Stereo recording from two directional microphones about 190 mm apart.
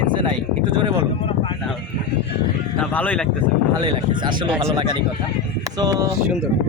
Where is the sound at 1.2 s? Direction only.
30° left (ahead or behind).